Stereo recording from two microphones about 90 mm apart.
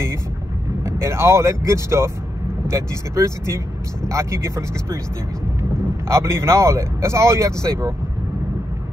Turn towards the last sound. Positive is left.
turn(degrees=-35)  # may be behind; listen again after turning